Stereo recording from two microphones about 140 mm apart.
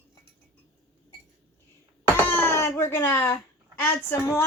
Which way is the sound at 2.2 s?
15° left (ahead or behind).